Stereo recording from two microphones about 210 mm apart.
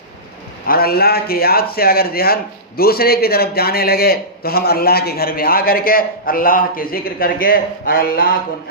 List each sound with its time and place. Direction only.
0.7 s a man's voice: 45° left (ahead or behind)